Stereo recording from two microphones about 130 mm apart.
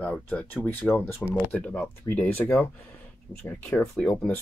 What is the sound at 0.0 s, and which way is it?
Speech, 10° left (ahead or behind).